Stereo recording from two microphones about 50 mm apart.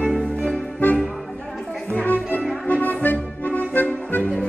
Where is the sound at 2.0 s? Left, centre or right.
Left.